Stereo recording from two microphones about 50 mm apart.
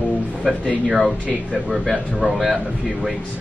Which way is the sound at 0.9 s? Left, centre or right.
Centre.